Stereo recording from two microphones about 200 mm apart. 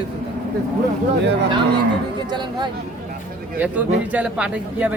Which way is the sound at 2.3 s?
20° right (ahead or behind).